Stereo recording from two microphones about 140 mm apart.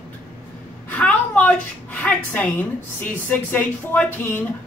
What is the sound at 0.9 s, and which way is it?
A woman's voice, 10° left (ahead or behind).